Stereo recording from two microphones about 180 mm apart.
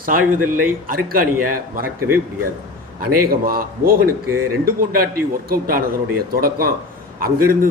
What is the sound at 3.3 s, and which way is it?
A man's voice, 55° right (ahead or behind).